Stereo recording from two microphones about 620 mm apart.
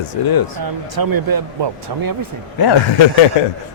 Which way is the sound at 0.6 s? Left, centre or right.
Right.